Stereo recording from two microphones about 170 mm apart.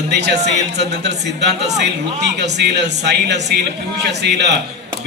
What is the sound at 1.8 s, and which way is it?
Speech, 85° right.